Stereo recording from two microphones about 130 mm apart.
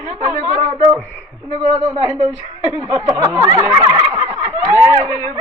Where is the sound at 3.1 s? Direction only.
30° right (ahead or behind).